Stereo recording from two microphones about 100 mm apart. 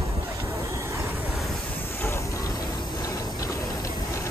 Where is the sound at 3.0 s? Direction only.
35° left (ahead or behind).